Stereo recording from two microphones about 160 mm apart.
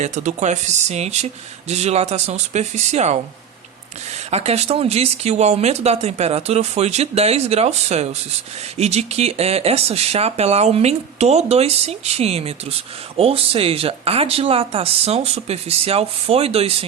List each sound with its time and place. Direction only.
0.0 s speech: 50° right (ahead or behind)
4.3 s speech: 40° right (ahead or behind)